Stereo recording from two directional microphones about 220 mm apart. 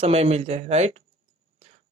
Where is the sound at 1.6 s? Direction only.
30° right (ahead or behind).